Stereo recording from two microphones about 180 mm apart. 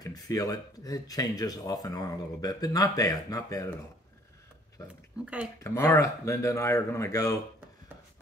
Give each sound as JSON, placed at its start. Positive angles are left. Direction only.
{"t": 0.0, "sound": "speech", "side_deg": 20}
{"t": 5.2, "sound": "speech", "side_deg": -10}
{"t": 5.6, "sound": "speech", "side_deg": 15}